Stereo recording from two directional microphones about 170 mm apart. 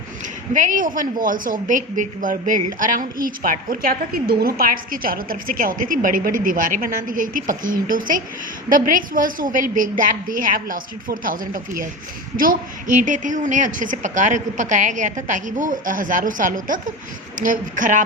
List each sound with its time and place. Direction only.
0.5 s a woman's voice: 50° right (ahead or behind)